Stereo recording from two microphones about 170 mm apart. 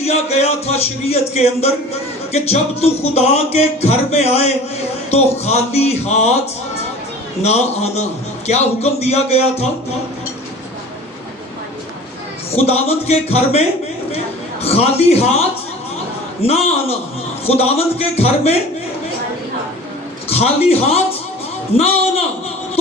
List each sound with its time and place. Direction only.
0.0 s speech: 40° left (ahead or behind)
7.4 s speech: 40° left (ahead or behind)
12.5 s speech: 35° left (ahead or behind)
20.2 s a man's voice: 35° left (ahead or behind)